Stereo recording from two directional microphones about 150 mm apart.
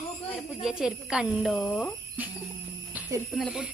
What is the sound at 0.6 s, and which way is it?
Speech, 5° right (ahead or behind).